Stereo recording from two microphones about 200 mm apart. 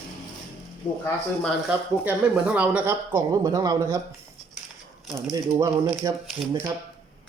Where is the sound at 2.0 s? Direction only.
5° right (ahead or behind).